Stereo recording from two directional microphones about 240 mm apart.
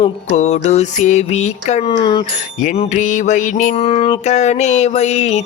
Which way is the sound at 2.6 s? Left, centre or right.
Left.